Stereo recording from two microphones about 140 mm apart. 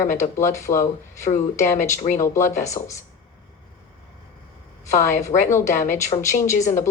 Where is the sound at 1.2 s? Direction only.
55° left (ahead or behind).